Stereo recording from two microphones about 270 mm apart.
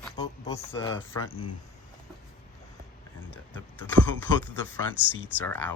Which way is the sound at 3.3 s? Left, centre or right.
Centre.